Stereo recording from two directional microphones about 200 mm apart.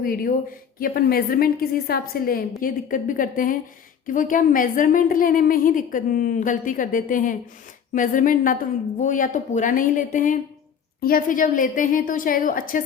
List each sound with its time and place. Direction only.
0.0 s a woman's voice: 45° left (ahead or behind)